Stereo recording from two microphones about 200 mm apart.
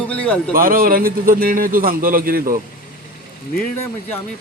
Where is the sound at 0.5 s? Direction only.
45° right (ahead or behind).